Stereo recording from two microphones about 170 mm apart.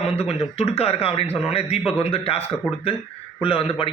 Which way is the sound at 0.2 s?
35° left (ahead or behind).